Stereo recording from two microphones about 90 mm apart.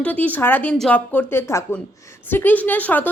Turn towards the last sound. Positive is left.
turn(degrees=20)  # may be behind; listen again after turning